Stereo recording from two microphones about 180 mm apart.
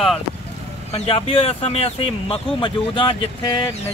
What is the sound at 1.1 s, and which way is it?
Speech, 30° left (ahead or behind).